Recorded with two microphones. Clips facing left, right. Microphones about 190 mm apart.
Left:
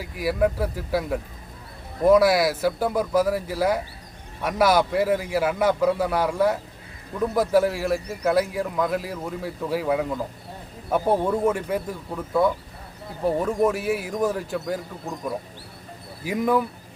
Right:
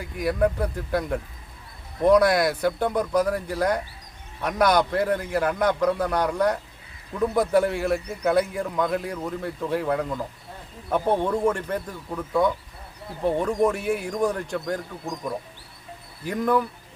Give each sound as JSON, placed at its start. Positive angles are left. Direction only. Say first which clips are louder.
{"t": 0.0, "sound": "a man's voice", "louder": "even", "side_deg": 5}